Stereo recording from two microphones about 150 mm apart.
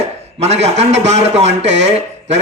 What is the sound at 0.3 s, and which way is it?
A man's voice, 45° right (ahead or behind).